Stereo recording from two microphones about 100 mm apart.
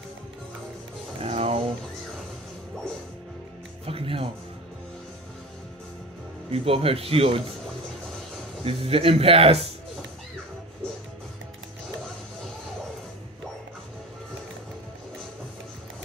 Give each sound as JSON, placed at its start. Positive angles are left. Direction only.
{"t": 1.2, "sound": "music", "side_deg": -85}
{"t": 3.8, "sound": "music", "side_deg": -70}
{"t": 6.5, "sound": "speech", "side_deg": -75}
{"t": 8.6, "sound": "speech", "side_deg": -75}